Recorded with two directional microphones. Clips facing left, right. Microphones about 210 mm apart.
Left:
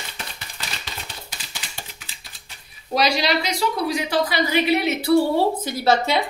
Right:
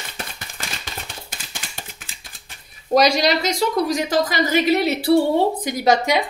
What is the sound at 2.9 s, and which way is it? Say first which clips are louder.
Speech: right 4 dB; 45° right (ahead or behind).